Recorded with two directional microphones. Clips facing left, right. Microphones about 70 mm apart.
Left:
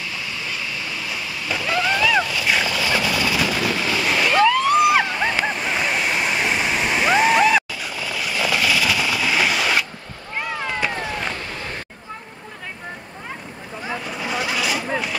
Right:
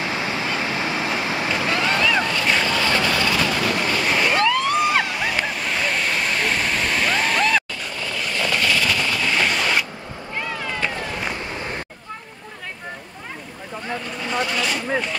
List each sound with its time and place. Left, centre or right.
0.0 s waves: right
1.7 s boat: centre
2.3 s vehicle: centre
5.2 s waterfall: centre
10.4 s cat: centre
13.8 s vehicle: centre